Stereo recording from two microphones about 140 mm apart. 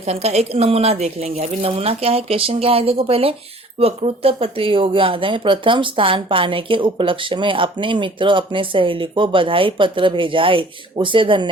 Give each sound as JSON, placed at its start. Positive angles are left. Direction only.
{"t": 0.0, "sound": "speech", "side_deg": -50}